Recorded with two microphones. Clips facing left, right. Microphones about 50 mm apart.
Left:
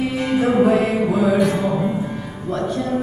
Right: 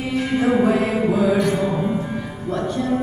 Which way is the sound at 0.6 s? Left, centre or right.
Centre.